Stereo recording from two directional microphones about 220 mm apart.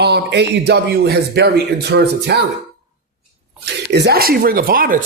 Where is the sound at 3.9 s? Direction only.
45° right (ahead or behind).